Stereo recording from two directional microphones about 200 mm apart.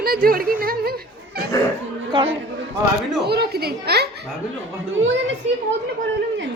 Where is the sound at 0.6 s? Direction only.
50° right (ahead or behind).